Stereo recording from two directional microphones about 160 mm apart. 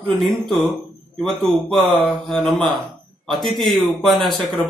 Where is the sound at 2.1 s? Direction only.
5° left (ahead or behind).